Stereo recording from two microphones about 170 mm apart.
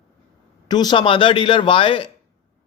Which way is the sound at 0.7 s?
25° left (ahead or behind).